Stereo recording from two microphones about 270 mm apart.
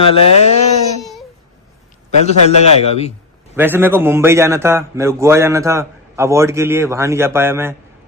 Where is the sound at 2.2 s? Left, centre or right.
Left.